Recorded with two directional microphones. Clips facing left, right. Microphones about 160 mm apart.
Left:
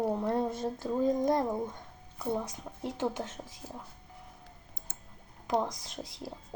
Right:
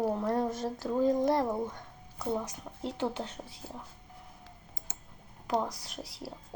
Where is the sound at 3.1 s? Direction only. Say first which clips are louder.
Even; 20° left (ahead or behind).